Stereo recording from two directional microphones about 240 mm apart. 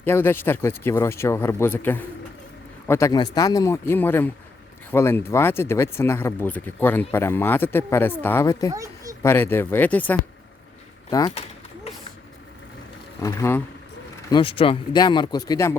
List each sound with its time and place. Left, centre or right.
0.0 s speech: centre
8.7 s a sound: centre
9.2 s speech: centre
11.1 s speech: centre
13.2 s speech: centre